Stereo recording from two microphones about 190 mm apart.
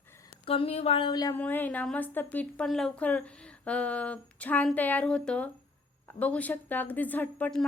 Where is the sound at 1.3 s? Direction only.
10° left (ahead or behind).